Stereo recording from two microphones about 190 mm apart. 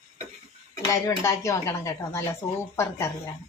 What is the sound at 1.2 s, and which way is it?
A woman's voice, 15° left (ahead or behind).